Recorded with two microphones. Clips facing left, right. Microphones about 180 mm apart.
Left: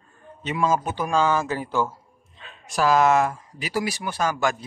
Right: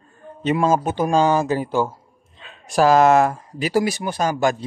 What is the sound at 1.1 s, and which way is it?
Speech, 35° right (ahead or behind).